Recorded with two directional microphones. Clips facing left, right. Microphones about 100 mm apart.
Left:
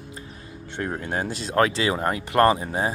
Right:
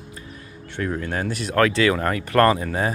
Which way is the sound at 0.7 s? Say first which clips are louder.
Right 2 dB; 25° left (ahead or behind).